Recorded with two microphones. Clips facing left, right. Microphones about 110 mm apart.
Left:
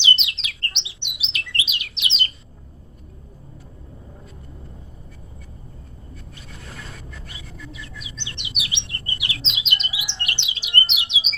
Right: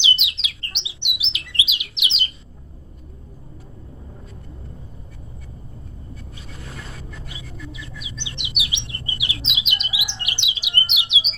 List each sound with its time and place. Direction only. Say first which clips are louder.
0.0 s bird: left 1 dB; 15° right (ahead or behind)
7.3 s bird: right 3 dB; 15° right (ahead or behind)